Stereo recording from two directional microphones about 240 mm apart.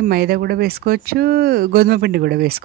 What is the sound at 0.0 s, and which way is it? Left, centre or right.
Speech, right.